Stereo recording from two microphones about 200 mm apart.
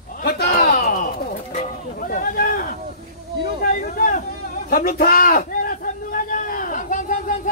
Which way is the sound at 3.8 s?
40° left (ahead or behind).